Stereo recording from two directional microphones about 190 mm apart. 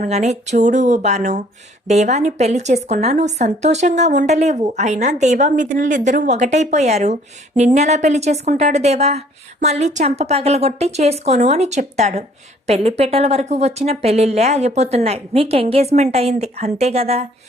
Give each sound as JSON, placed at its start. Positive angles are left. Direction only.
{"t": 0.0, "sound": "speech", "side_deg": -40}